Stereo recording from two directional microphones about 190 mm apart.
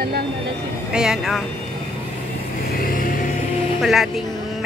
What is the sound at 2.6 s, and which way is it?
Vehicle, 50° left (ahead or behind).